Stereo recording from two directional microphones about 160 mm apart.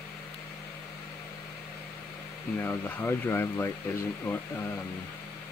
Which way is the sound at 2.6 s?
15° left (ahead or behind).